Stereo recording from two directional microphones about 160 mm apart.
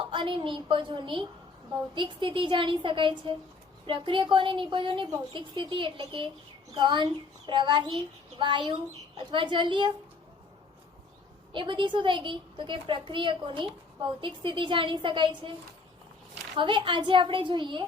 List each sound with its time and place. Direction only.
0.0 s a child's voice: 30° right (ahead or behind)
11.5 s a child's voice: 30° right (ahead or behind)
16.6 s a child's voice: 30° right (ahead or behind)